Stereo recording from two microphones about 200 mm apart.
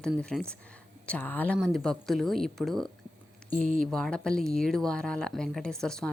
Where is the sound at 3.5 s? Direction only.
40° right (ahead or behind).